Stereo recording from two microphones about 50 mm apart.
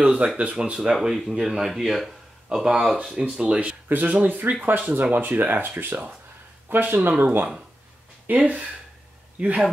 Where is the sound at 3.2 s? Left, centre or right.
Centre.